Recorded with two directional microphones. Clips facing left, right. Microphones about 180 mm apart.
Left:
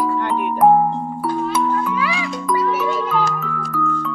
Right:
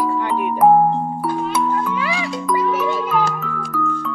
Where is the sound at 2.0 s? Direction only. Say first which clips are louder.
Even; 30° right (ahead or behind).